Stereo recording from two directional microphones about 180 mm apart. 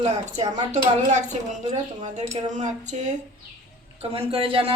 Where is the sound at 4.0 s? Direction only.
30° right (ahead or behind).